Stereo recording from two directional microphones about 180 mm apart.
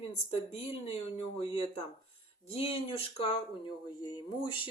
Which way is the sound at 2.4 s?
35° left (ahead or behind).